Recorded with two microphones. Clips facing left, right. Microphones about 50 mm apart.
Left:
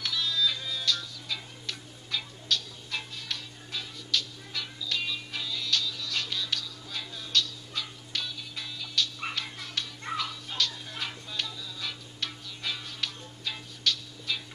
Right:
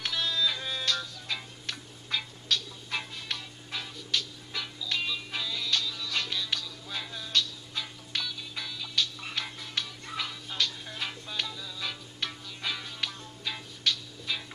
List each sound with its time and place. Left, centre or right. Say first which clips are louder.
0.0 s music: even; right
10.1 s music: left 6 dB; left
10.9 s music: even; centre